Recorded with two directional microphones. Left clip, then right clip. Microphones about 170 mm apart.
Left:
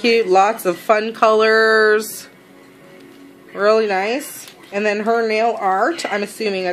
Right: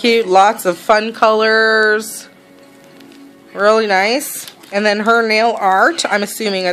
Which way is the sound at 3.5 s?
20° right (ahead or behind).